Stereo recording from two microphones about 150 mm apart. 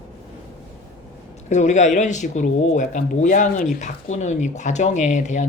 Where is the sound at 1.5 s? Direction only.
50° left (ahead or behind).